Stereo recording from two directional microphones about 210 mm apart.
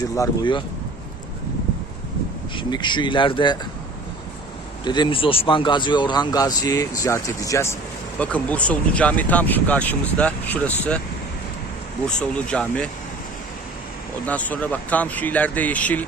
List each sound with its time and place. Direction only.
0.0 s speech: 20° left (ahead or behind)
2.6 s speech: 20° left (ahead or behind)
4.9 s speech: 20° left (ahead or behind); by 11.0 s 5° left (ahead or behind)
12.0 s speech: 5° left (ahead or behind)
14.3 s speech: 5° left (ahead or behind)